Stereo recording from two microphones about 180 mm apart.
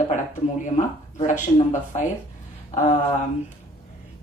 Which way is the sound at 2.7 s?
40° left (ahead or behind).